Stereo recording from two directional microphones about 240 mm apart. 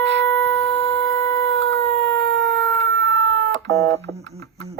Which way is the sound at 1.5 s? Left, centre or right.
Right.